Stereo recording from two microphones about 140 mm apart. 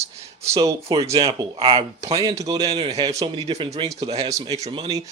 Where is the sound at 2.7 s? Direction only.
35° right (ahead or behind).